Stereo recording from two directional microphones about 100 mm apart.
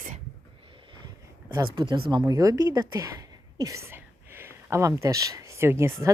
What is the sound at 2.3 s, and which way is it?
Speech, 35° right (ahead or behind).